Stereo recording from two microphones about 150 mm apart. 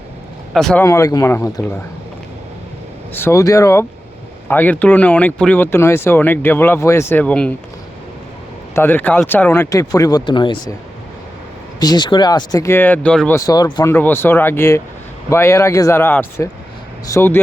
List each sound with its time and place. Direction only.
0.5 s speech: 5° left (ahead or behind)
0.8 s speech: 20° left (ahead or behind)
3.1 s speech: 15° left (ahead or behind)
8.7 s speech: 15° left (ahead or behind); by 10.8 s 30° left (ahead or behind)
11.8 s speech: 30° left (ahead or behind); by 13.3 s 10° left (ahead or behind)
13.3 s speech: 25° left (ahead or behind)